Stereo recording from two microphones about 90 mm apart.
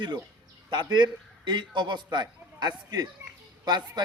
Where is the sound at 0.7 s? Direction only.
55° right (ahead or behind).